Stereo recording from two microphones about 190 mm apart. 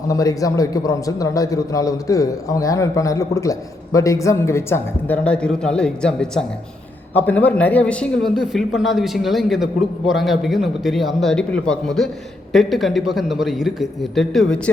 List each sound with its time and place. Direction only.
0.1 s a man's voice: 15° left (ahead or behind)